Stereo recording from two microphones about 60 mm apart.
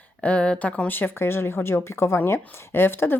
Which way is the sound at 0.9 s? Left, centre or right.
Left.